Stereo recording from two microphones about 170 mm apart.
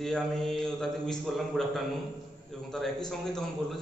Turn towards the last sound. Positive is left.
turn(degrees=0)  # may be behind; listen again after turning